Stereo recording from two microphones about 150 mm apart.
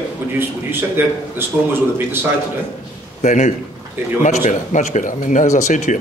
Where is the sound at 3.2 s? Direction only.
55° left (ahead or behind).